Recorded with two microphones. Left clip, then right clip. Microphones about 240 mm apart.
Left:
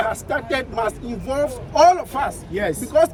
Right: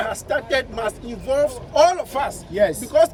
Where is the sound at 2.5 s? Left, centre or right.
Right.